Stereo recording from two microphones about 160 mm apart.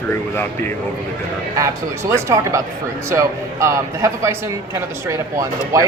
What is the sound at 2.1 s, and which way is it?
Speech, 20° right (ahead or behind).